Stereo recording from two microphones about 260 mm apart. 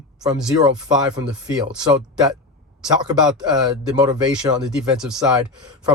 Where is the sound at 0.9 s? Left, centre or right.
Centre.